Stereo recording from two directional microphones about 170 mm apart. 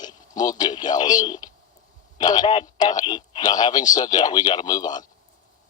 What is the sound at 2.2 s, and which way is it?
A man's voice, 25° left (ahead or behind).